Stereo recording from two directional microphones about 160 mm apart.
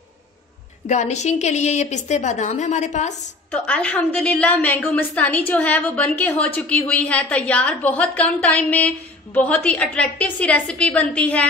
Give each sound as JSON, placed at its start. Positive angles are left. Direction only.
{"t": 0.8, "sound": "a woman's voice", "side_deg": 45}
{"t": 3.5, "sound": "a woman's voice", "side_deg": 10}